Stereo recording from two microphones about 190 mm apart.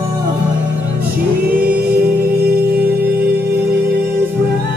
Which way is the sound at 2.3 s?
55° right (ahead or behind).